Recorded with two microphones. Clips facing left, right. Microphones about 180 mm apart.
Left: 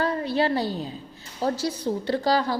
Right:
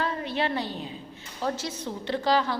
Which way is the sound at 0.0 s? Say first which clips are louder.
Left 5 dB; 35° left (ahead or behind).